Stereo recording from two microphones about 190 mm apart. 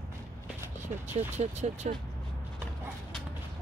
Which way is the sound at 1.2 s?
35° right (ahead or behind).